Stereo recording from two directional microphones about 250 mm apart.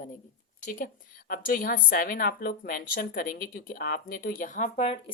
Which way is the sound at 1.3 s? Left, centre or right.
Left.